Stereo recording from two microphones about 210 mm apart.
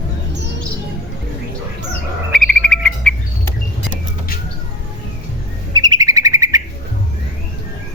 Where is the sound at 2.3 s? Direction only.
5° left (ahead or behind).